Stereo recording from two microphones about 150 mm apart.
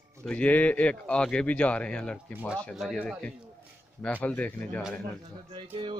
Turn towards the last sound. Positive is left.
turn(degrees=-35)  # may be behind; listen again after turning